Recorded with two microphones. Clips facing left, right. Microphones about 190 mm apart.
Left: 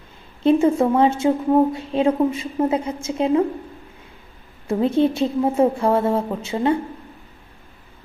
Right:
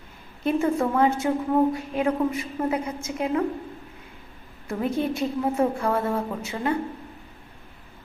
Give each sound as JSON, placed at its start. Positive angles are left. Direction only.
{"t": 0.4, "sound": "a woman's voice", "side_deg": 25}
{"t": 4.7, "sound": "a woman's voice", "side_deg": 25}